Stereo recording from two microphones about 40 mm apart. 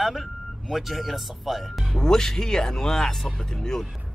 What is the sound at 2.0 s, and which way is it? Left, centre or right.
Speech, centre.